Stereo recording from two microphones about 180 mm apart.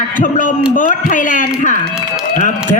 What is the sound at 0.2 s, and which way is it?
A man's voice, 45° left (ahead or behind).